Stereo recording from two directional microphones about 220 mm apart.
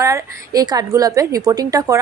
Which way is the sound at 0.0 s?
15° right (ahead or behind).